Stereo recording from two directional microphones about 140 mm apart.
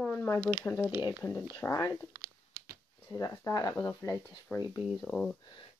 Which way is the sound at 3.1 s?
25° left (ahead or behind).